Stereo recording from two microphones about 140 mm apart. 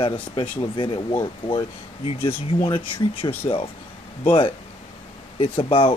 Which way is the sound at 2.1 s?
40° left (ahead or behind).